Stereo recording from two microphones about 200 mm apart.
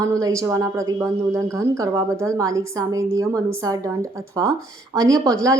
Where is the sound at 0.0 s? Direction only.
15° right (ahead or behind).